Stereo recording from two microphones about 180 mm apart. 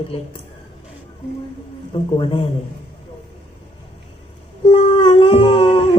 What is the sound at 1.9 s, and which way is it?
Speech, 30° left (ahead or behind).